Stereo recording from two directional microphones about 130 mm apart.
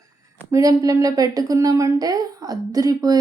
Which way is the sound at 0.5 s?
25° right (ahead or behind).